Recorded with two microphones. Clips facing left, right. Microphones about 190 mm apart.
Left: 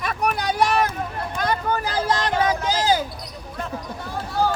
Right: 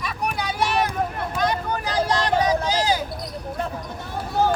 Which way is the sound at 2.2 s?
30° right (ahead or behind).